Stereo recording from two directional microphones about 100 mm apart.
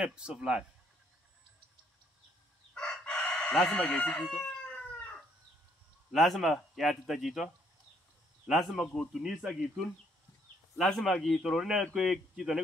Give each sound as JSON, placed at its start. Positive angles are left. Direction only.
{"t": 0.0, "sound": "speech", "side_deg": -10}
{"t": 2.7, "sound": "chicken", "side_deg": 10}
{"t": 3.7, "sound": "speech", "side_deg": 10}
{"t": 4.6, "sound": "chicken", "side_deg": 15}
{"t": 6.1, "sound": "a man's voice", "side_deg": 0}
{"t": 10.8, "sound": "a man's voice", "side_deg": 5}